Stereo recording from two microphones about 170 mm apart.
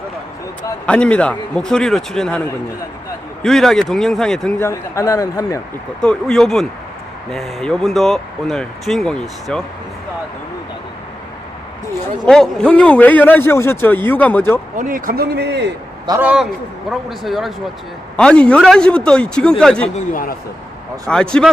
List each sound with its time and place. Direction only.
0.9 s speech: 5° left (ahead or behind)
4.6 s a man's voice: 20° left (ahead or behind)
6.0 s speech: 5° left (ahead or behind)
12.2 s speech: 5° left (ahead or behind)
14.8 s a man's voice: 55° right (ahead or behind); by 15.7 s 90° right
16.2 s speech: 5° right (ahead or behind)
21.1 s speech: 5° left (ahead or behind)